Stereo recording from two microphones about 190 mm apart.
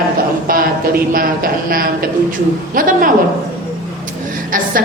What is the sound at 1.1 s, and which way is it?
A man's voice, 50° right (ahead or behind).